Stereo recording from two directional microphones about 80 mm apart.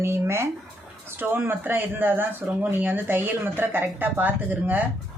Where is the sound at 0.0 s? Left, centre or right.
Right.